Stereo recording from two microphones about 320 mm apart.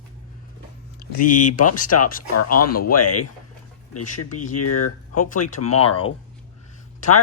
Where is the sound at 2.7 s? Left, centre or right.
Left.